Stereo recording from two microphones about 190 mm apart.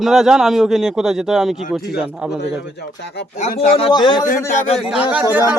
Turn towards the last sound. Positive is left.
turn(degrees=-10)  # may be behind; listen again after turning